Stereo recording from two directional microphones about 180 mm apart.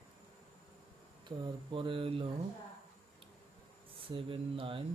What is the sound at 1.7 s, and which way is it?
Speech, 30° right (ahead or behind).